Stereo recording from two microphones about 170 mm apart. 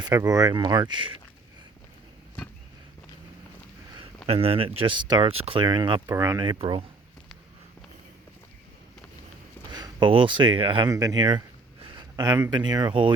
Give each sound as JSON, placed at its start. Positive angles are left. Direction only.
{"t": 0.0, "sound": "speech", "side_deg": -20}
{"t": 4.3, "sound": "speech", "side_deg": -35}
{"t": 9.7, "sound": "speech", "side_deg": -25}